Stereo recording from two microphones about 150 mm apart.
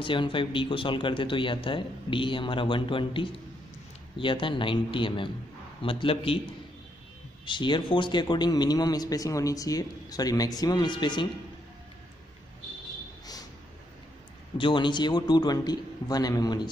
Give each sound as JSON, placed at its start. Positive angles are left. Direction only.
{"t": 0.0, "sound": "speech", "side_deg": 35}
{"t": 7.4, "sound": "speech", "side_deg": 30}
{"t": 14.6, "sound": "speech", "side_deg": 30}